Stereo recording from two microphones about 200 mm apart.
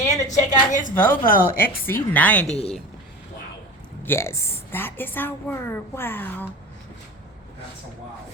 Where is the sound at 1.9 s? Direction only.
10° left (ahead or behind).